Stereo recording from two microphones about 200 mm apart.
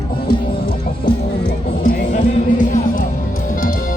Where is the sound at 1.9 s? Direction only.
40° left (ahead or behind).